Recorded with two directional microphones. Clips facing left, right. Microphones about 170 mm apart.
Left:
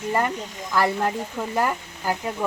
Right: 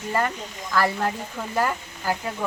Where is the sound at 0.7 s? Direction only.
20° left (ahead or behind).